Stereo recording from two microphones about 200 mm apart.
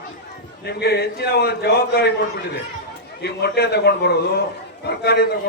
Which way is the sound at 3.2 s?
55° left (ahead or behind).